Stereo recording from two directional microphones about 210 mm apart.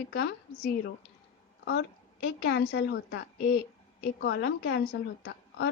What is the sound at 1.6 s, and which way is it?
A woman's voice, 55° left (ahead or behind).